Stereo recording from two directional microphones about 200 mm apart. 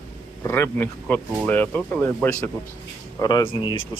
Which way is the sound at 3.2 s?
20° left (ahead or behind).